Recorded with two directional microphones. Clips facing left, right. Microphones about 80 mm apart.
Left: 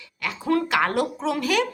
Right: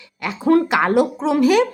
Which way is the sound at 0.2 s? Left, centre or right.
Right.